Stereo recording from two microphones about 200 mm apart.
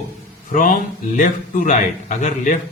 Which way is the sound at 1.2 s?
40° left (ahead or behind).